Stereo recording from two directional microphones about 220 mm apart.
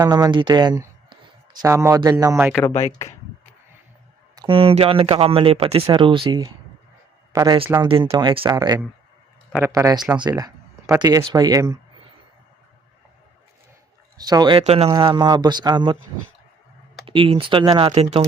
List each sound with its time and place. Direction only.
0.0 s a man's voice: 15° right (ahead or behind)
2.6 s speech: 30° left (ahead or behind)
4.4 s a man's voice: 25° right (ahead or behind)
14.2 s a man's voice: 15° right (ahead or behind)
14.8 s speech: 20° right (ahead or behind)
17.1 s speech: 25° right (ahead or behind)